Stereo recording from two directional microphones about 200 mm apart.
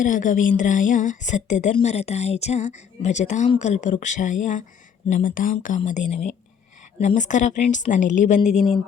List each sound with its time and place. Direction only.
0.0 s a woman's voice: 40° left (ahead or behind)